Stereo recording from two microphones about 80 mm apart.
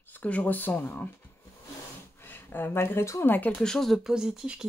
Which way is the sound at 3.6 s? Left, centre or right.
Centre.